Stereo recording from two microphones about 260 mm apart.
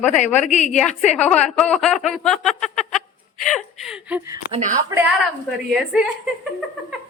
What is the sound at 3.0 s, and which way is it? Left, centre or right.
Chuckle, left.